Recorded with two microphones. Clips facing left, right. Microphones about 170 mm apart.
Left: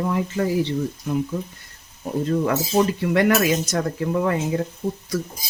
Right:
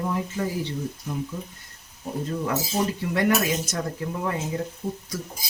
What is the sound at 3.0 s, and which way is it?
Cutlery, 75° left (ahead or behind).